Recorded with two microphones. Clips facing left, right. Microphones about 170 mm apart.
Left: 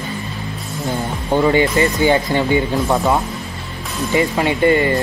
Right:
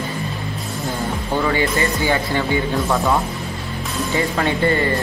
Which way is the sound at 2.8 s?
20° left (ahead or behind).